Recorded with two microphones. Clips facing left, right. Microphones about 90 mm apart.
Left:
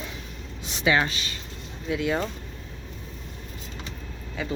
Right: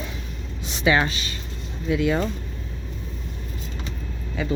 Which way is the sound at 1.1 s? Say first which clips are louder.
Right 2 dB; 5° right (ahead or behind).